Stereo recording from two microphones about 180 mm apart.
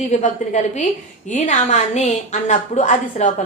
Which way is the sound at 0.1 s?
40° left (ahead or behind).